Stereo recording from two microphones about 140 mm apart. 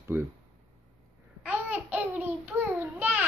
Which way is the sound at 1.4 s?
10° right (ahead or behind).